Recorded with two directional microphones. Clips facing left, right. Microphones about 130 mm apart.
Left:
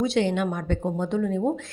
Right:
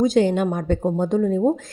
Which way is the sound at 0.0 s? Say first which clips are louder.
Right 5 dB; 40° right (ahead or behind).